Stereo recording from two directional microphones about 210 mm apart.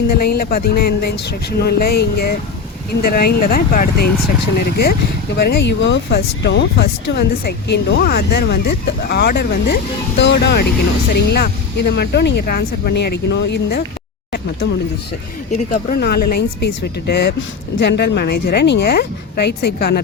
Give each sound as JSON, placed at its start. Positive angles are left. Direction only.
{"t": 0.1, "sound": "speech", "side_deg": 45}
{"t": 15.5, "sound": "speech", "side_deg": 40}